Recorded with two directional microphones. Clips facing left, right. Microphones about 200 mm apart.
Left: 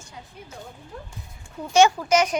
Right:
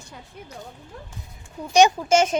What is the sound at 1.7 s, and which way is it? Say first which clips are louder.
Speech: right 1 dB; 15° right (ahead or behind).